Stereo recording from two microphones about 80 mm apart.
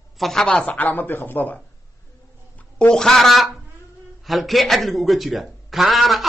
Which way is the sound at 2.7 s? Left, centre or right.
Centre.